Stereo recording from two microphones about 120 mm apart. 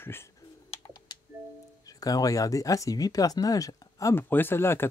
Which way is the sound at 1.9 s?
30° left (ahead or behind).